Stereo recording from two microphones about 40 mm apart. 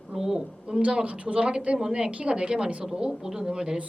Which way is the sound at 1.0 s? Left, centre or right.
Right.